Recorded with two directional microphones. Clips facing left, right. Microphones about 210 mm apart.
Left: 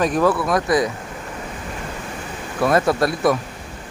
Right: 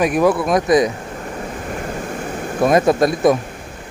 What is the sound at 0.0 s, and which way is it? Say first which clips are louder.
Speech: right 3 dB; 15° right (ahead or behind).